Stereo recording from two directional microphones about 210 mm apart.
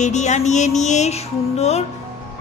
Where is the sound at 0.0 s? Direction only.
35° left (ahead or behind).